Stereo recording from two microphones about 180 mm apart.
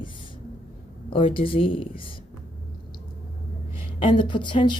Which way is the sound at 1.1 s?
30° left (ahead or behind).